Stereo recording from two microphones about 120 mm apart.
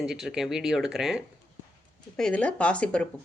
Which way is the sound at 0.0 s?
5° right (ahead or behind).